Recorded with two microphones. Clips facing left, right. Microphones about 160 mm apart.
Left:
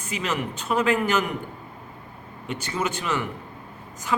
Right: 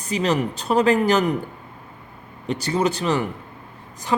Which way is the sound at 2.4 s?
35° right (ahead or behind).